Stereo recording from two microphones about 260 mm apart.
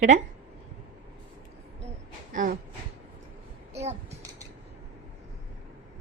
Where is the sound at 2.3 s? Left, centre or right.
Right.